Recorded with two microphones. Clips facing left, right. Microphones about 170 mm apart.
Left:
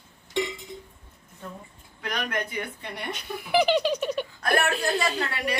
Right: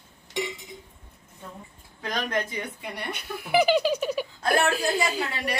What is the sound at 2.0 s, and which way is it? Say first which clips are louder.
Speech: right 2 dB; 25° right (ahead or behind).